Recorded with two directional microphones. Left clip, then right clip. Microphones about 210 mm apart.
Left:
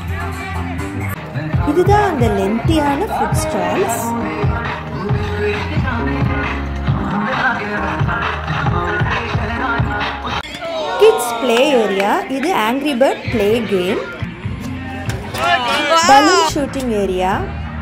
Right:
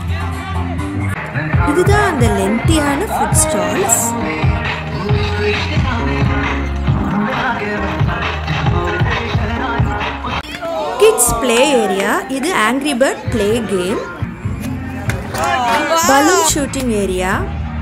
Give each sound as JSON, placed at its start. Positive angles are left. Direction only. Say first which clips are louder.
{"t": 1.5, "sound": "music", "louder": "right 1 dB", "side_deg": -25}
{"t": 1.9, "sound": "a woman's voice", "louder": "even", "side_deg": 0}
{"t": 3.2, "sound": "music", "louder": "right 2 dB", "side_deg": 5}
{"t": 7.2, "sound": "music", "louder": "left 2 dB", "side_deg": 15}
{"t": 7.7, "sound": "music", "louder": "even", "side_deg": -5}
{"t": 9.5, "sound": "music", "louder": "left 2 dB", "side_deg": 20}
{"t": 10.7, "sound": "children playing", "louder": "right 1 dB", "side_deg": -60}
{"t": 11.4, "sound": "a woman's voice", "louder": "even", "side_deg": -10}
{"t": 15.4, "sound": "a sound", "louder": "even", "side_deg": -60}
{"t": 15.9, "sound": "a woman's voice", "louder": "left 4 dB", "side_deg": -5}